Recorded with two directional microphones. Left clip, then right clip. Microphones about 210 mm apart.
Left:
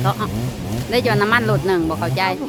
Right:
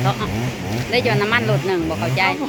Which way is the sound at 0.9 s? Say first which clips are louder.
Left 1 dB; 20° left (ahead or behind).